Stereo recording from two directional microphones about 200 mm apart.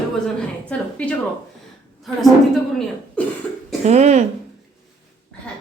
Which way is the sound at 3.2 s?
5° left (ahead or behind).